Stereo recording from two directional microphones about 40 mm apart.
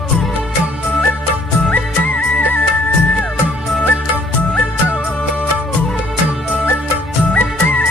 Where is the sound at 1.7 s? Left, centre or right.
Left.